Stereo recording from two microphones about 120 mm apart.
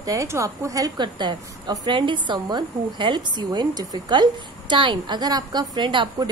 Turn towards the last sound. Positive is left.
turn(degrees=-40)  # may be behind; listen again after turning